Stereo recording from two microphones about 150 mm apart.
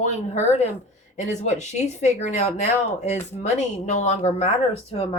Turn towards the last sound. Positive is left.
turn(degrees=45)  # may be behind; listen again after turning